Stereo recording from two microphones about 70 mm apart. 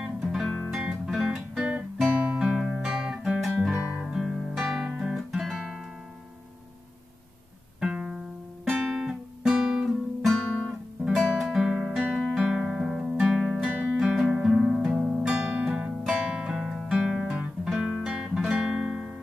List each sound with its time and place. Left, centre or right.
0.0 s music: centre
2.0 s guitar: centre
4.0 s guitar: centre
7.8 s music: centre
8.6 s guitar: centre
11.3 s guitar: centre
13.3 s music: centre
13.7 s music: right
13.9 s music: centre
17.6 s guitar: centre